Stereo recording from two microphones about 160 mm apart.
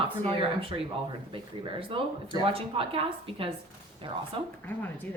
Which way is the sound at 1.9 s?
35° right (ahead or behind).